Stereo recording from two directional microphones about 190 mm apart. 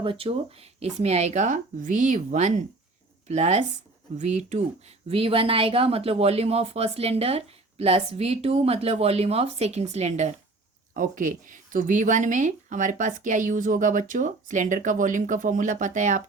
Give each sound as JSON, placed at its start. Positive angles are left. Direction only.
{"t": 0.0, "sound": "speech", "side_deg": -30}